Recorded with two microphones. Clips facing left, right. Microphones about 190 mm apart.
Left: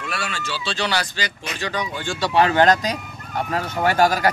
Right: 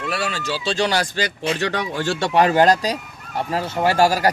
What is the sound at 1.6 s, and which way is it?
Speech, 65° right (ahead or behind).